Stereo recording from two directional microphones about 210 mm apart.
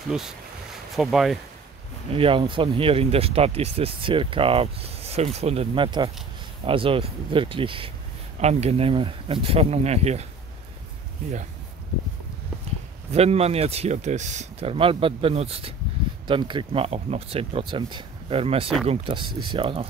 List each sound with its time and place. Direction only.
0.1 s speech: centre (ahead or behind)
2.0 s speech: 25° right (ahead or behind)
13.1 s speech: 30° right (ahead or behind)